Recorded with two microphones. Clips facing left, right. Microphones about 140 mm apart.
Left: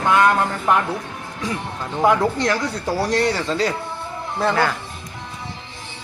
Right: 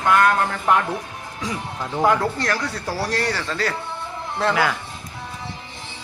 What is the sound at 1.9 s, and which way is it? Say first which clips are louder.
Speech: left 2 dB; 5° left (ahead or behind).